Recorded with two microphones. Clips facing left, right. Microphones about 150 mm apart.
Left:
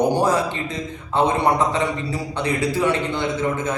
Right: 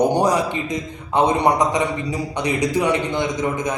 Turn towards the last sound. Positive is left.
turn(degrees=-15)  # may be behind; listen again after turning